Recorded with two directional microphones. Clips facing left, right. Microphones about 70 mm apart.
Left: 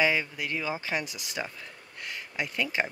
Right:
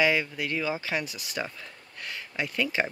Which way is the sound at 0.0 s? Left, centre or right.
Centre.